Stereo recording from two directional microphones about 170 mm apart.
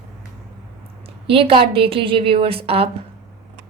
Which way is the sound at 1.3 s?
30° right (ahead or behind).